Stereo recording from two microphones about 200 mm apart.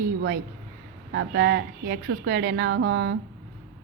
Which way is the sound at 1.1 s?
65° right (ahead or behind).